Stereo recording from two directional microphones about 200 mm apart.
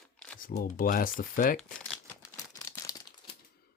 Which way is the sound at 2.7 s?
15° left (ahead or behind).